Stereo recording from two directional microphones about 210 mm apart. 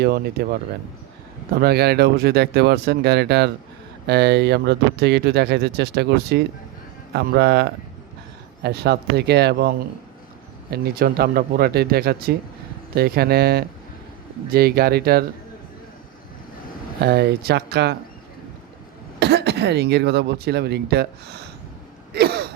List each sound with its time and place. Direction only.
0.0 s speech: 50° right (ahead or behind)
1.5 s speech: 50° right (ahead or behind)
17.0 s speech: 50° right (ahead or behind)
19.2 s speech: 50° right (ahead or behind)
22.1 s a sound: 50° right (ahead or behind)